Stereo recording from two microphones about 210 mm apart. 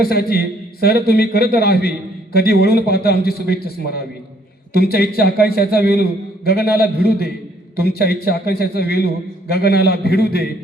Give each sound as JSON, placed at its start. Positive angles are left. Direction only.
{"t": 0.0, "sound": "a man's voice", "side_deg": 45}
{"t": 7.9, "sound": "a man's voice", "side_deg": 50}